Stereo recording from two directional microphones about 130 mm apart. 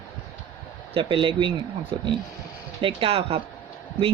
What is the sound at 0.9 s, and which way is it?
Speech, 40° right (ahead or behind).